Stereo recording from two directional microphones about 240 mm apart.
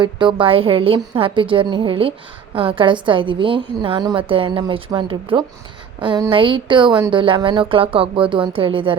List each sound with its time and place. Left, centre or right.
0.0 s a woman's voice: centre